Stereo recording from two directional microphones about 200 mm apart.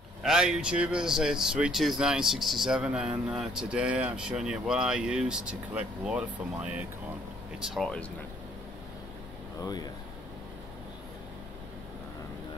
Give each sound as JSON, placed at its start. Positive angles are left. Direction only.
{"t": 0.2, "sound": "speech", "side_deg": -5}
{"t": 9.6, "sound": "speech", "side_deg": 20}